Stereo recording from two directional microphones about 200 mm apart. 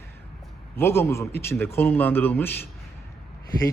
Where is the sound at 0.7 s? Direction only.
10° left (ahead or behind).